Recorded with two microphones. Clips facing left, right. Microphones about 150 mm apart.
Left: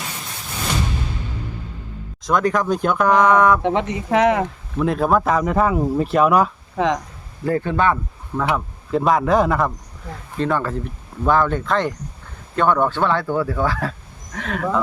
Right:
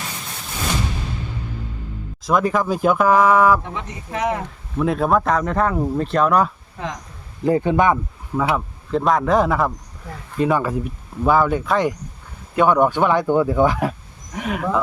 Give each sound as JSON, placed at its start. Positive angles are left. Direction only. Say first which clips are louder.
{"t": 2.2, "sound": "speech", "louder": "even", "side_deg": -5}
{"t": 3.6, "sound": "speech", "louder": "left 11 dB", "side_deg": 90}
{"t": 4.8, "sound": "speech", "louder": "even", "side_deg": 0}
{"t": 6.7, "sound": "speech", "louder": "left 10 dB", "side_deg": 90}
{"t": 7.4, "sound": "speech", "louder": "right 2 dB", "side_deg": -15}
{"t": 8.4, "sound": "speech", "louder": "right 1 dB", "side_deg": -5}